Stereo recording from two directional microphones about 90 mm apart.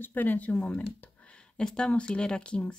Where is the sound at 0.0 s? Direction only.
20° left (ahead or behind).